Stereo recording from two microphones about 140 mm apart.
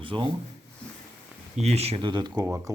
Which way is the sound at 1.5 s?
50° right (ahead or behind).